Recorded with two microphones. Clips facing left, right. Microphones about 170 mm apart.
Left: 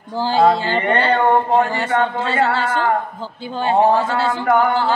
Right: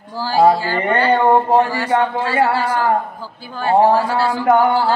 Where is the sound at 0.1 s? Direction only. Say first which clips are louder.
Right 1 dB; 20° left (ahead or behind).